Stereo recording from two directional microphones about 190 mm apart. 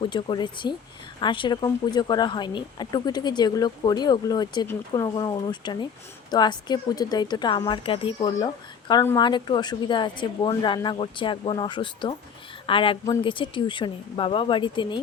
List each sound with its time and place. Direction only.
0.0 s speech: 25° left (ahead or behind)